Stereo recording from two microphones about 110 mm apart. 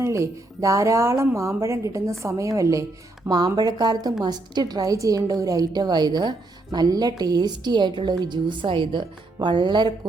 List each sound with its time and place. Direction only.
0.0 s a woman's voice: 25° right (ahead or behind); by 9.9 s 40° right (ahead or behind)